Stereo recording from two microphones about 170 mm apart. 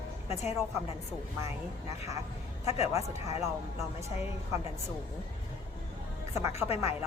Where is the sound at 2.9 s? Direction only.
20° right (ahead or behind).